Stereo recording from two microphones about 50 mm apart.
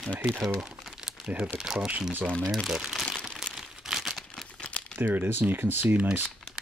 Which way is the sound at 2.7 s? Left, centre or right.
Centre.